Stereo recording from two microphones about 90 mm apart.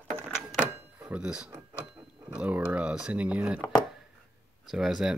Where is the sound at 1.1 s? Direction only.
10° right (ahead or behind).